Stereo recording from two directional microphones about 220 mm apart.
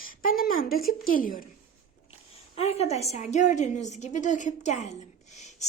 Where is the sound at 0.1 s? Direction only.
40° left (ahead or behind).